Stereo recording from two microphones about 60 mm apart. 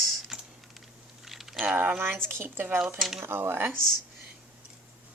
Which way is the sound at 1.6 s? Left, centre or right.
Right.